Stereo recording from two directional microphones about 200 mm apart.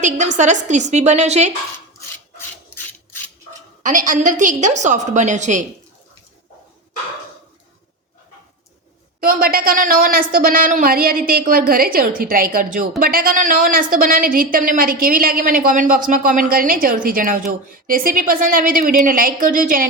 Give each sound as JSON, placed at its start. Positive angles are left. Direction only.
{"t": 0.3, "sound": "a woman's voice", "side_deg": -35}
{"t": 3.8, "sound": "a woman's voice", "side_deg": -40}
{"t": 9.2, "sound": "speech", "side_deg": -45}